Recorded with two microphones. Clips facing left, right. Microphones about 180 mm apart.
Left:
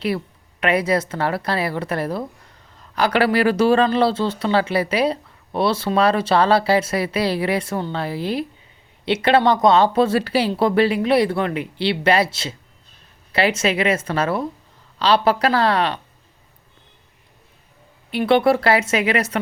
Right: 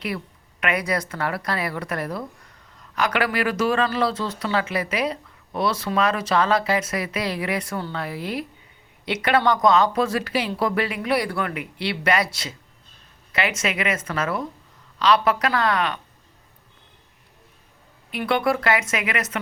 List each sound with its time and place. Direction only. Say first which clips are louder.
0.6 s speech: left 6 dB; 30° left (ahead or behind)
18.1 s speech: left 6 dB; 30° left (ahead or behind)